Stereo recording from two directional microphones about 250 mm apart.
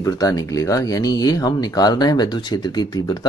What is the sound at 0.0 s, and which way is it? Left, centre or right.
Speech, centre.